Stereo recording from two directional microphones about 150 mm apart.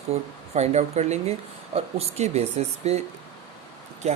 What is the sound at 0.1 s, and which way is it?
Speech, 45° right (ahead or behind).